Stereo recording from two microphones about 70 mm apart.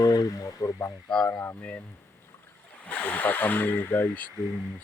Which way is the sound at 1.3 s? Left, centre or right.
Left.